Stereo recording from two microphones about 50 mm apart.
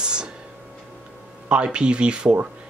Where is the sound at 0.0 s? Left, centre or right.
Centre.